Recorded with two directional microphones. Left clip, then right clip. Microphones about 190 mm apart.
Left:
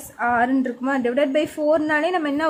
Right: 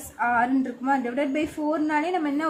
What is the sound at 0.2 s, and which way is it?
A woman's voice, 40° left (ahead or behind).